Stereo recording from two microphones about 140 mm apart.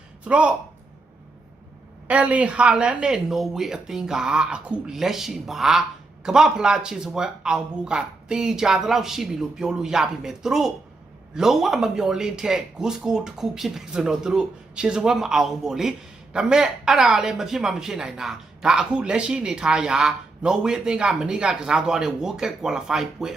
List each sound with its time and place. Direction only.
0.3 s speech: 5° right (ahead or behind)
2.0 s speech: 10° right (ahead or behind)